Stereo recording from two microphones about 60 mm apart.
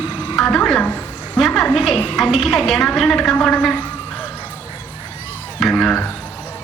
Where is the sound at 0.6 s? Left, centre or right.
Centre.